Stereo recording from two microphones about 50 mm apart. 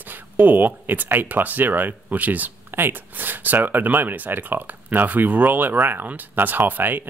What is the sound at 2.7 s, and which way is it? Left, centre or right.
Speech, right.